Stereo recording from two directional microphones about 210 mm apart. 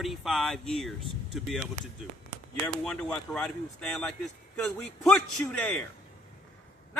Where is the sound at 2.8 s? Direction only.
5° left (ahead or behind).